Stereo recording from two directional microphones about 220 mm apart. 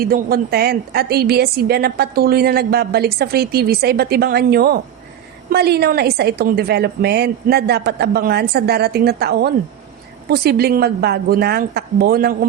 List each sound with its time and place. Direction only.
0.0 s a woman's voice: 45° right (ahead or behind)